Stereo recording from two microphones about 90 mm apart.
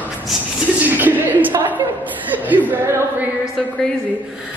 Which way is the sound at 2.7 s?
20° right (ahead or behind).